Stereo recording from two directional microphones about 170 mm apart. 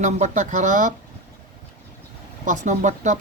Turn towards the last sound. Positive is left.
turn(degrees=-45)  # may be behind; listen again after turning